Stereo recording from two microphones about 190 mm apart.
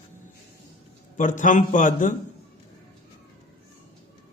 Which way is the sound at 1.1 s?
40° left (ahead or behind).